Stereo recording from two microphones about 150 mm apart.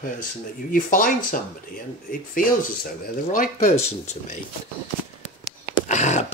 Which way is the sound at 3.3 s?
60° left (ahead or behind).